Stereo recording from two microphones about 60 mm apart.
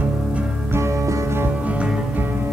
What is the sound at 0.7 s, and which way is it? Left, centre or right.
Music, right.